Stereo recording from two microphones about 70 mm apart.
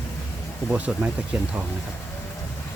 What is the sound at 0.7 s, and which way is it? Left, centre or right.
Speech, centre.